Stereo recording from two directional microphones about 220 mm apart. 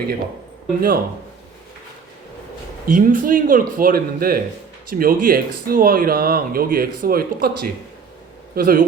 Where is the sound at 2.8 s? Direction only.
35° right (ahead or behind).